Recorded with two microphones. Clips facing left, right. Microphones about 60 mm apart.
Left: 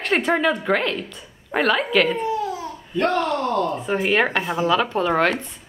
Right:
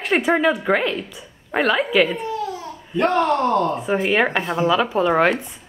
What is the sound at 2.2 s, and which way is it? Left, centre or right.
Babbling, centre.